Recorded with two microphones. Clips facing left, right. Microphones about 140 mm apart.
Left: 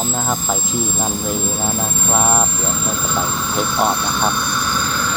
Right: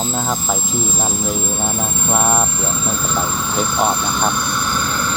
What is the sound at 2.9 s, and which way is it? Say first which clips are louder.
Vehicle: even; centre (ahead or behind).